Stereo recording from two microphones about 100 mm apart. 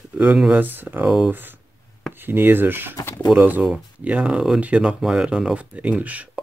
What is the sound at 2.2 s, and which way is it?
Speech, 20° right (ahead or behind).